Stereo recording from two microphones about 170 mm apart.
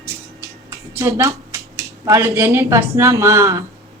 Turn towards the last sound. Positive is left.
turn(degrees=-15)  # may be behind; listen again after turning